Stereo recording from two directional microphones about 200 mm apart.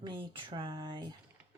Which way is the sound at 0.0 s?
25° right (ahead or behind).